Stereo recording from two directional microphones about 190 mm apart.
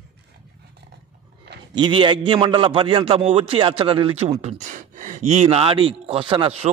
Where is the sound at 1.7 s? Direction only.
25° right (ahead or behind).